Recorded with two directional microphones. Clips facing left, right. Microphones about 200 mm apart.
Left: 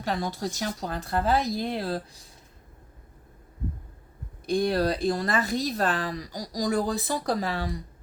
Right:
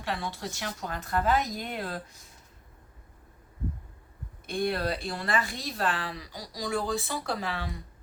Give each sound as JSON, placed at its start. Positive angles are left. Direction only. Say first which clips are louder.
{"t": 0.0, "sound": "speech", "louder": "left 5 dB", "side_deg": 40}
{"t": 4.4, "sound": "speech", "louder": "left 5 dB", "side_deg": 35}